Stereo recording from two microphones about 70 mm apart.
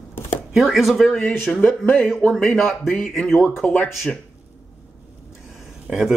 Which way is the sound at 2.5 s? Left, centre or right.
Left.